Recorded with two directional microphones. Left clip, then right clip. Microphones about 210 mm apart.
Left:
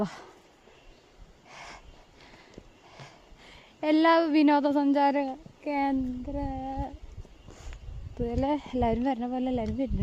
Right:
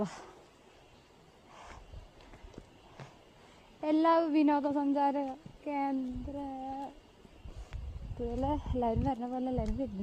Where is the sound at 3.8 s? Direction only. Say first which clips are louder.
Left 5 dB; 35° left (ahead or behind).